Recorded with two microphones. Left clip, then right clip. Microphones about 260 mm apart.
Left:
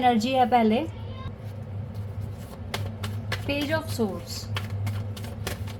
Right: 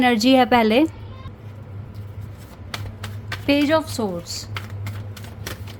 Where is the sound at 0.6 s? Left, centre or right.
Right.